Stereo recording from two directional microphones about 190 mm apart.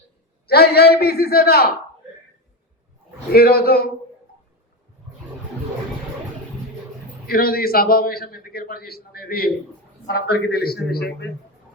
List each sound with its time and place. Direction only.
0.4 s a man's voice: 55° left (ahead or behind)
3.3 s a man's voice: 55° left (ahead or behind)
7.3 s a man's voice: 50° left (ahead or behind)